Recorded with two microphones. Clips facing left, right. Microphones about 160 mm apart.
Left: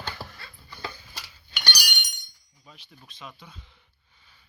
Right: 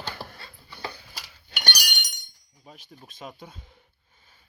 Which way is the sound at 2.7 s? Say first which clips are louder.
Right 4 dB; 45° right (ahead or behind).